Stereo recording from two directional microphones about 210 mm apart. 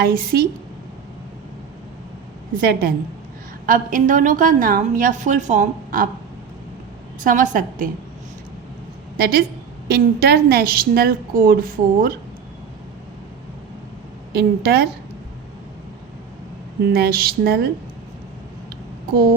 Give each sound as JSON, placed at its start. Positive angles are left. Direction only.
{"t": 0.0, "sound": "a woman's voice", "side_deg": -45}
{"t": 2.6, "sound": "a woman's voice", "side_deg": -50}
{"t": 7.3, "sound": "a woman's voice", "side_deg": -40}
{"t": 9.1, "sound": "a woman's voice", "side_deg": -45}
{"t": 14.3, "sound": "a woman's voice", "side_deg": -50}
{"t": 16.9, "sound": "a woman's voice", "side_deg": -45}